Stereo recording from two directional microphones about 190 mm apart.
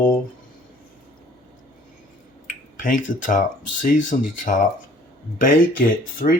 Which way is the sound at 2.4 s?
45° left (ahead or behind).